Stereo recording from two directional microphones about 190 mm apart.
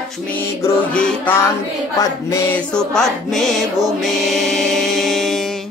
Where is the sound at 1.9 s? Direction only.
20° left (ahead or behind).